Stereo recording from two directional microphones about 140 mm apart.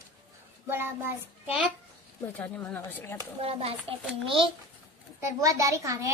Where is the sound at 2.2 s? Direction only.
10° left (ahead or behind).